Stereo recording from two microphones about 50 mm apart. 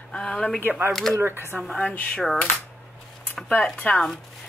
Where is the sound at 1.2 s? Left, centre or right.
Right.